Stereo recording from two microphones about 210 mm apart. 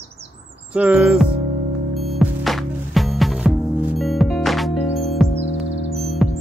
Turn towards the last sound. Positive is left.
turn(degrees=0)  # may be behind; listen again after turning